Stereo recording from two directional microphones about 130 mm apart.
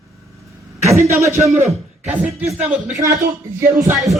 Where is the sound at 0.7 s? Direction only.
20° right (ahead or behind); by 2.7 s 5° right (ahead or behind).